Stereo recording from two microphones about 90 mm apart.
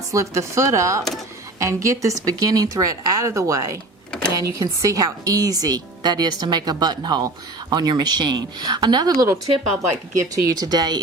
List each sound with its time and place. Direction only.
0.1 s a woman's voice: 35° right (ahead or behind)
9.1 s a woman's voice: 35° right (ahead or behind); by 11.0 s 50° right (ahead or behind)